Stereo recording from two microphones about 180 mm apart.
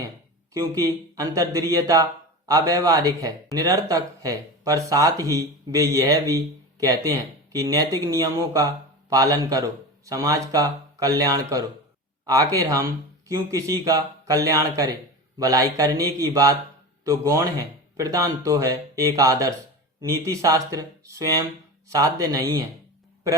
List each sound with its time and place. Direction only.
0.5 s speech: 15° right (ahead or behind)